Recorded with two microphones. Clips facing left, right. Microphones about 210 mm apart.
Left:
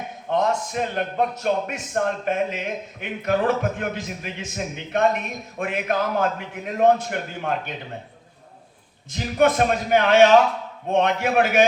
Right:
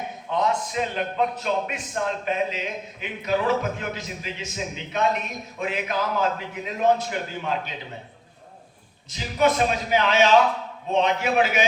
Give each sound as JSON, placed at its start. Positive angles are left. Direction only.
{"t": 0.3, "sound": "a man's voice", "side_deg": 50}
{"t": 9.1, "sound": "a man's voice", "side_deg": 55}